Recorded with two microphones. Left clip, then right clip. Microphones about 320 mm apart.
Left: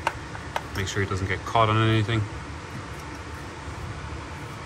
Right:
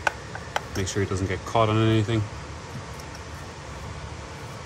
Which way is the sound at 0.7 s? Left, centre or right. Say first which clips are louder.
Left 1 dB; centre.